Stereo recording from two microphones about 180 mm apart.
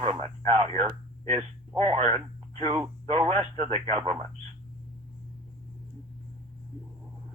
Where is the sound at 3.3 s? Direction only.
35° right (ahead or behind).